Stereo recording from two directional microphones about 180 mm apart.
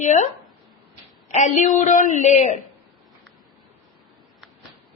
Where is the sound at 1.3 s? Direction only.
40° left (ahead or behind).